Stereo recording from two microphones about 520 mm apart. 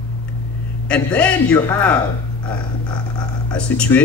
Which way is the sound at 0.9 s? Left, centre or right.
Centre.